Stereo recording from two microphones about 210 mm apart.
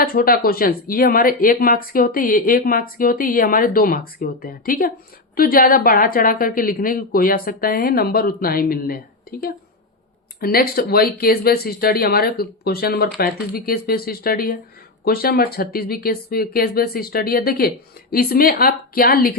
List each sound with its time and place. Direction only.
0.0 s speech: 45° left (ahead or behind)
10.4 s speech: 45° left (ahead or behind)